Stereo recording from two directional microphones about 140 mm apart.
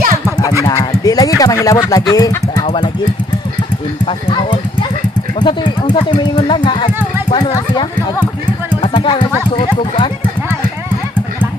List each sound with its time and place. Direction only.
0.7 s speech: 25° left (ahead or behind)
4.0 s speech: 40° left (ahead or behind)
8.8 s speech: 35° left (ahead or behind)
9.6 s a sound: 35° left (ahead or behind)